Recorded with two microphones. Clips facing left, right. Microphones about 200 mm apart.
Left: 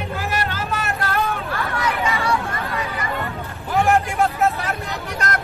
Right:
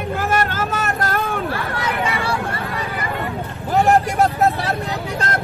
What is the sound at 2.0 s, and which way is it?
Vehicle, 30° right (ahead or behind).